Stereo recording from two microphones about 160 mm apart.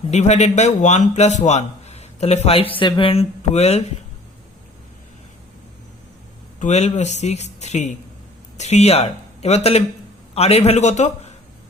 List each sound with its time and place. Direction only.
0.1 s speech: 45° left (ahead or behind)
6.6 s speech: 45° left (ahead or behind)